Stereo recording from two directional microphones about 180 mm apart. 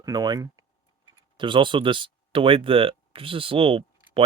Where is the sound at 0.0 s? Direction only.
20° right (ahead or behind).